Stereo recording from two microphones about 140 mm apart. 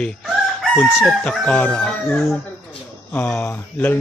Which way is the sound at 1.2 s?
10° left (ahead or behind).